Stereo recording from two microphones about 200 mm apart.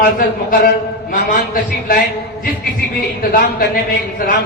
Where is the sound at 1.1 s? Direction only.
40° left (ahead or behind).